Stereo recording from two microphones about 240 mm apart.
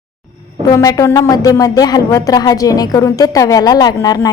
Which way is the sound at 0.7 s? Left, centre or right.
Centre.